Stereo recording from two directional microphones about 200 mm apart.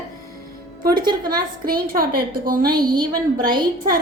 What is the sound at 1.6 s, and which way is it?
Speech, 50° right (ahead or behind).